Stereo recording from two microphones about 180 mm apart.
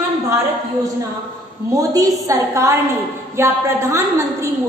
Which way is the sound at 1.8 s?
20° right (ahead or behind).